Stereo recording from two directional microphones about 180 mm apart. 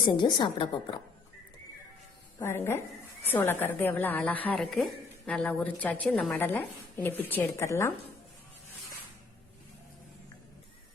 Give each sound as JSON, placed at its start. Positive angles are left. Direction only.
{"t": 0.0, "sound": "a woman's voice", "side_deg": 25}
{"t": 2.4, "sound": "a woman's voice", "side_deg": 15}